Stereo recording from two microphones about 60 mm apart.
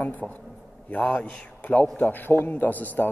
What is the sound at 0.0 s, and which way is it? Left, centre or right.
Speech, left.